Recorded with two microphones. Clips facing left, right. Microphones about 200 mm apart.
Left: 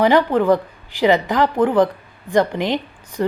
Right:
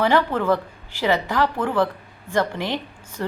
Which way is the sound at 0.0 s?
15° left (ahead or behind).